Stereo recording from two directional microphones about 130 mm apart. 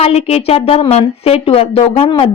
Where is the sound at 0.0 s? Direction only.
50° left (ahead or behind).